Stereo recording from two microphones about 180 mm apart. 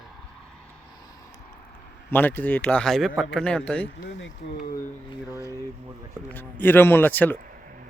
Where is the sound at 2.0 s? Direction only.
10° left (ahead or behind).